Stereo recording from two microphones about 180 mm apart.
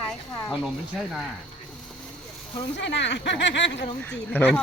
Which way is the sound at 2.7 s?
80° left.